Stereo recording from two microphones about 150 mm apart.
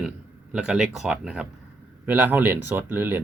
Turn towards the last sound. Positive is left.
turn(degrees=-15)  # may be behind; listen again after turning